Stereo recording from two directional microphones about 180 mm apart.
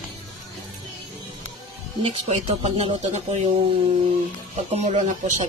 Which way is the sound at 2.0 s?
35° right (ahead or behind).